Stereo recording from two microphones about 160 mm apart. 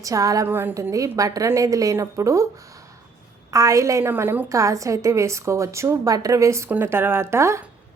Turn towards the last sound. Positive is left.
turn(degrees=-15)  # may be behind; listen again after turning